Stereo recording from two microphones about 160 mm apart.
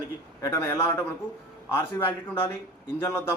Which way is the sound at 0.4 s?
15° left (ahead or behind).